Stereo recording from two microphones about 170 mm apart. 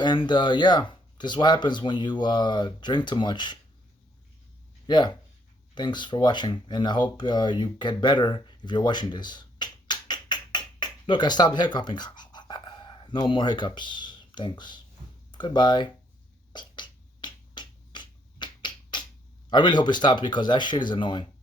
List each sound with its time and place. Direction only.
0.0 s speech: 25° left (ahead or behind)
4.9 s speech: 25° left (ahead or behind)
16.5 s finger snapping: 25° left (ahead or behind)
19.5 s speech: 25° left (ahead or behind)